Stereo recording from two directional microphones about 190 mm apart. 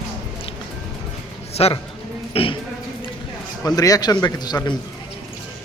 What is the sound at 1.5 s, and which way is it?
A man's voice, 35° left (ahead or behind).